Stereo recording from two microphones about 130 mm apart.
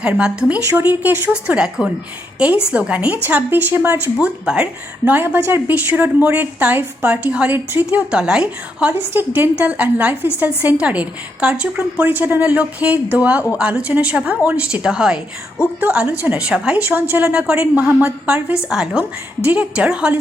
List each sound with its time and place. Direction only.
0.0 s a woman's voice: 10° right (ahead or behind)